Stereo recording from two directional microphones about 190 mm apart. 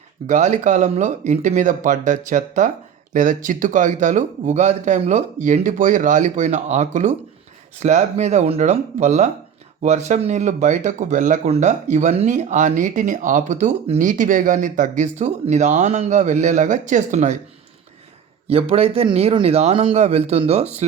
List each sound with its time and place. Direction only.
0.3 s speech: 40° right (ahead or behind)
18.4 s speech: 30° right (ahead or behind)